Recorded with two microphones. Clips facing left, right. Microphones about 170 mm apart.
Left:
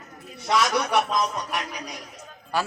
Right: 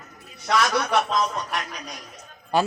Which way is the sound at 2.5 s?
20° right (ahead or behind).